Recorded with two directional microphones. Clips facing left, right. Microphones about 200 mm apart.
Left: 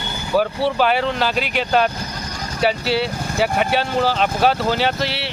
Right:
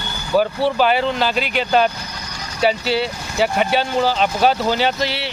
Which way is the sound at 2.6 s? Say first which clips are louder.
Right 1 dB; 5° left (ahead or behind).